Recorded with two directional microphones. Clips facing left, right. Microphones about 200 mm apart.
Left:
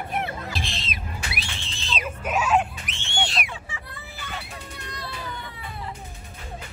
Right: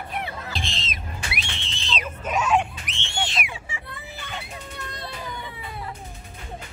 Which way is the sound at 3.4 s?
10° right (ahead or behind).